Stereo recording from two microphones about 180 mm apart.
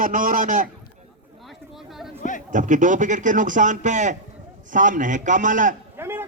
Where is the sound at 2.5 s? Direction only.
45° right (ahead or behind).